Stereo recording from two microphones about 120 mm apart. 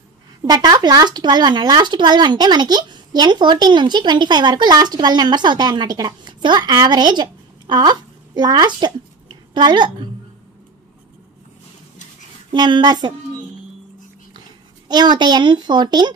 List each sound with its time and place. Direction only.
0.4 s speech: 35° right (ahead or behind)
12.5 s speech: 40° right (ahead or behind)
14.9 s speech: 35° right (ahead or behind)